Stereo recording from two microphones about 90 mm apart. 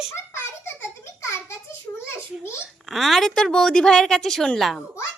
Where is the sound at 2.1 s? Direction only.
30° left (ahead or behind).